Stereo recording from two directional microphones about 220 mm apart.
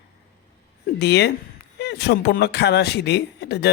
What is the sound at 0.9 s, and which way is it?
A man's voice, 50° left (ahead or behind).